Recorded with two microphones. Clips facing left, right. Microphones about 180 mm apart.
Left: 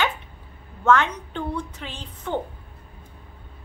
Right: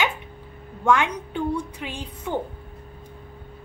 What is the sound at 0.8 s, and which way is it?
A woman's voice, 10° right (ahead or behind).